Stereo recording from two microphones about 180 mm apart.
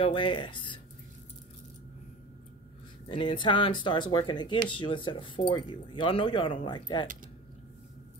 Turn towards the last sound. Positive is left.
turn(degrees=25)  # may be behind; listen again after turning